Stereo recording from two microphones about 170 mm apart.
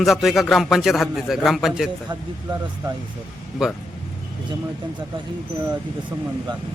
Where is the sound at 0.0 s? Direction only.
Centre (ahead or behind).